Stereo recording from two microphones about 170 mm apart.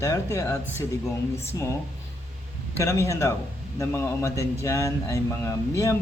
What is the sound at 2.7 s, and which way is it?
Speech, 15° left (ahead or behind).